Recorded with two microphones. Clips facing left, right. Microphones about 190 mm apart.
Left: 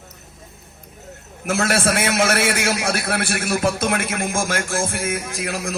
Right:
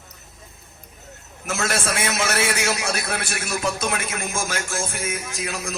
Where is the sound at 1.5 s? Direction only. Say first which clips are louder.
Left 5 dB; 55° left (ahead or behind).